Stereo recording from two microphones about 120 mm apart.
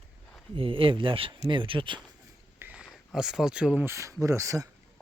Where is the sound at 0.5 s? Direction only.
50° right (ahead or behind).